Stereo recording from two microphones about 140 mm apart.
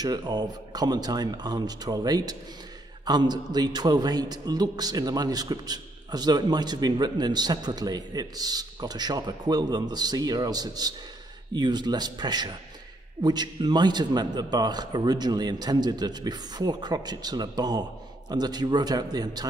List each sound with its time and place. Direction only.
0.0 s a man's voice: 30° right (ahead or behind)